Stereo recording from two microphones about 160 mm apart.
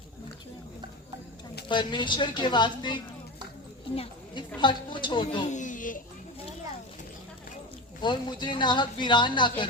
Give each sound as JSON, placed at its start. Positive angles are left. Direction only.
{"t": 1.6, "sound": "a woman's voice", "side_deg": 30}
{"t": 5.5, "sound": "a sound", "side_deg": 50}
{"t": 8.0, "sound": "speech", "side_deg": 30}